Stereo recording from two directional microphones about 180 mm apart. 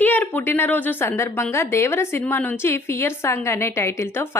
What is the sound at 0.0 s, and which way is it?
A woman's voice, 10° left (ahead or behind).